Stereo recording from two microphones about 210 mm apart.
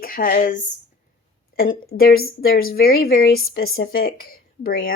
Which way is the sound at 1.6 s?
45° left (ahead or behind).